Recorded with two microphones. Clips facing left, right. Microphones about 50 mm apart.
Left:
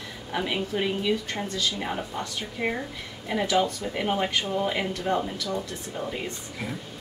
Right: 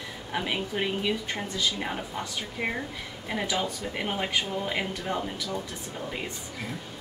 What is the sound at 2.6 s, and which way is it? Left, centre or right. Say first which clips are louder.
Speech: left 3 dB; centre.